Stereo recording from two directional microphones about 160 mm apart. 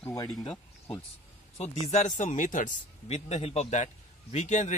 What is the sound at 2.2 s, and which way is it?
A man's voice, 55° left (ahead or behind).